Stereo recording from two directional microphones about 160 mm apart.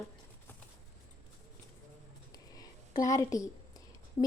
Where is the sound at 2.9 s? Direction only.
20° left (ahead or behind).